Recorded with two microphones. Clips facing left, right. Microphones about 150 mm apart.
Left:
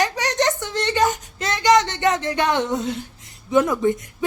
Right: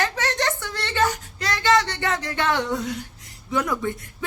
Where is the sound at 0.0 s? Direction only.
15° left (ahead or behind).